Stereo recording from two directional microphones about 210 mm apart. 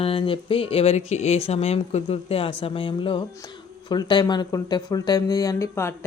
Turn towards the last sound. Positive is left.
turn(degrees=15)  # may be behind; listen again after turning